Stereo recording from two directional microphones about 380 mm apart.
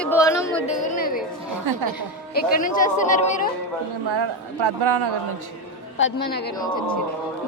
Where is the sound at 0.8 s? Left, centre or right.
Left.